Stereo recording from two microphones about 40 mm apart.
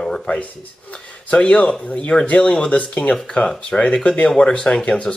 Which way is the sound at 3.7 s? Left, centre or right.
Left.